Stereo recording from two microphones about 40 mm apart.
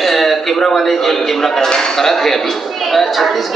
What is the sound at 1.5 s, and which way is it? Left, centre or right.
A woman's voice, centre.